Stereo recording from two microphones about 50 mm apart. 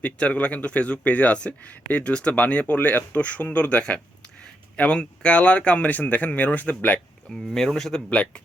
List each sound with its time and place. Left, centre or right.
0.0 s speech: left
2.7 s speech: left
7.5 s a man's voice: centre
8.1 s speech: left